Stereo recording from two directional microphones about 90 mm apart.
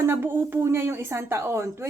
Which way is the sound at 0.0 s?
30° right (ahead or behind).